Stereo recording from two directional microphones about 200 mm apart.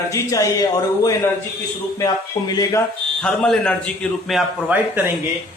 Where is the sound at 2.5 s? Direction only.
20° left (ahead or behind).